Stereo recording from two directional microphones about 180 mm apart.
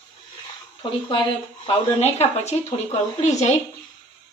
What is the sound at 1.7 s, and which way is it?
Speech, 35° left (ahead or behind).